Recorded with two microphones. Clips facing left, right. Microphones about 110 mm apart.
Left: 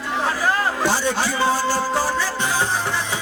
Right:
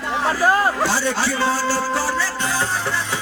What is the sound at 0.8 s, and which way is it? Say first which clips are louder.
Music: even; 15° left (ahead or behind).